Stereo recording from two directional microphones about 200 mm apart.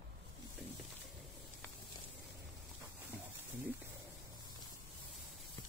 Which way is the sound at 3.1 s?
10° right (ahead or behind).